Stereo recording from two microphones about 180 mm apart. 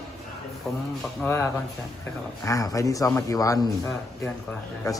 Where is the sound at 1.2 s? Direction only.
10° left (ahead or behind).